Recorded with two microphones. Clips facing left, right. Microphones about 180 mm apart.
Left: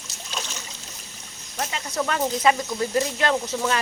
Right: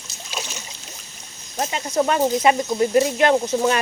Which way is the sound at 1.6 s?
25° right (ahead or behind).